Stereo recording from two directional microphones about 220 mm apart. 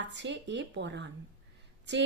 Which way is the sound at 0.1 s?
55° right (ahead or behind).